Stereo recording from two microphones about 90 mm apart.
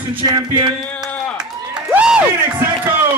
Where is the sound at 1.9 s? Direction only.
10° right (ahead or behind).